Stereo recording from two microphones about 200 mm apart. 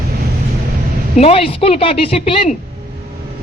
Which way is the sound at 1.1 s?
30° left (ahead or behind).